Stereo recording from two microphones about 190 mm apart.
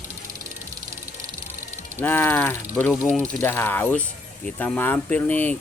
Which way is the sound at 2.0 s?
10° left (ahead or behind).